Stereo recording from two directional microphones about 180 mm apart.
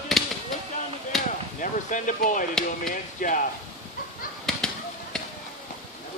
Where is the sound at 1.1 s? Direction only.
Centre (ahead or behind).